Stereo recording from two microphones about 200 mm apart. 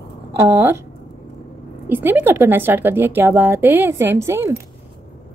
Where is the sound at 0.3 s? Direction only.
10° right (ahead or behind).